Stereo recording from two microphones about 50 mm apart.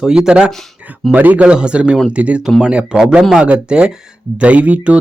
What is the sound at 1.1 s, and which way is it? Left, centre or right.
Speech, right.